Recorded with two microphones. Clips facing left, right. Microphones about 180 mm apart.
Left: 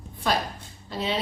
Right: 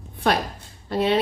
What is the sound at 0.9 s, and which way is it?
Speech, 60° right (ahead or behind).